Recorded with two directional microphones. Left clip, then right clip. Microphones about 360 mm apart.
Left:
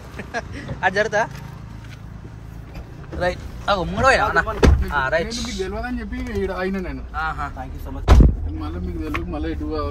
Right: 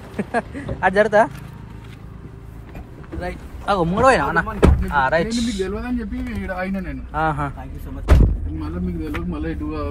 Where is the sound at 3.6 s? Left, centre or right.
Centre.